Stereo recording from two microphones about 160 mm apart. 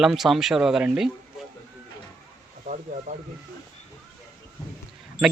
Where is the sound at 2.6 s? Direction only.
50° right (ahead or behind).